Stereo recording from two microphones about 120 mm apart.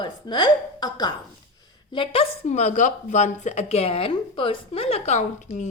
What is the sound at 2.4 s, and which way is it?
A woman's voice, 75° left (ahead or behind).